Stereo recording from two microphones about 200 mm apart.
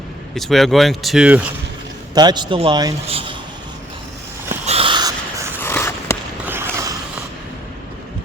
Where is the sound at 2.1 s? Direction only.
20° right (ahead or behind).